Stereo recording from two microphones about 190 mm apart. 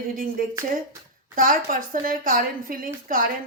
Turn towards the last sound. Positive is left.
turn(degrees=-45)  # may be behind; listen again after turning